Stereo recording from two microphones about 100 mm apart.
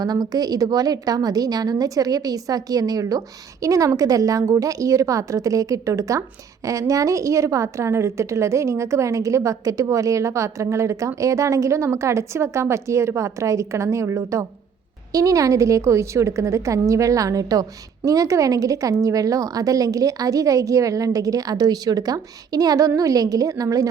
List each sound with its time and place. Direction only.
0.0 s a woman's voice: 40° right (ahead or behind)